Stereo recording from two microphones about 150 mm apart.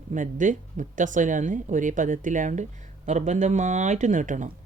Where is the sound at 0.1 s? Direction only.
60° right (ahead or behind).